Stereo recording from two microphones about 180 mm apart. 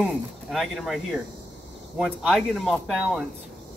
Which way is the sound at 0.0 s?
Centre (ahead or behind).